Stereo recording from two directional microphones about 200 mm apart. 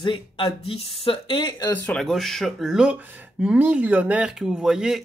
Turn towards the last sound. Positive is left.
turn(degrees=0)  # may be behind; listen again after turning